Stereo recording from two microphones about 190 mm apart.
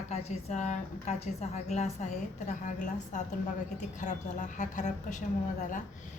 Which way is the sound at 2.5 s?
40° left (ahead or behind).